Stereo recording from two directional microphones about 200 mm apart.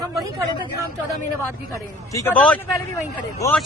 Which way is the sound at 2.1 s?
10° left (ahead or behind).